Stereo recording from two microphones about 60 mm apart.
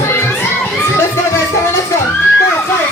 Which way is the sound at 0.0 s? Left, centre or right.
Left.